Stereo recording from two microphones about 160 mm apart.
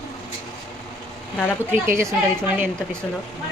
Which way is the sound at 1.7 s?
15° right (ahead or behind).